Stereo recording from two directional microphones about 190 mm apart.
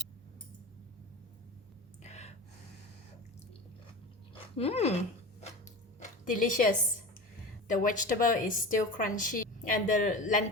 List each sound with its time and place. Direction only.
2.0 s gasp: 35° left (ahead or behind)
4.5 s speech: 30° left (ahead or behind)
6.0 s a sound: 45° left (ahead or behind)
7.7 s a woman's voice: 45° left (ahead or behind)